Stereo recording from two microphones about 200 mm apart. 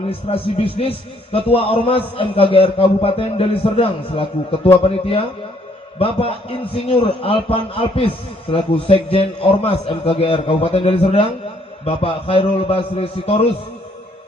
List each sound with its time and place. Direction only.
0.1 s a man's voice: 30° left (ahead or behind)